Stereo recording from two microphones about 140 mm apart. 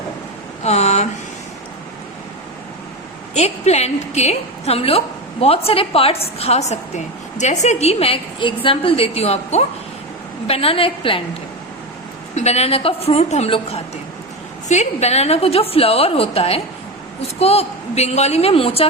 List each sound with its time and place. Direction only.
0.6 s a sound: 50° left (ahead or behind)
3.3 s a woman's voice: 50° left (ahead or behind)
12.3 s a woman's voice: 50° left (ahead or behind)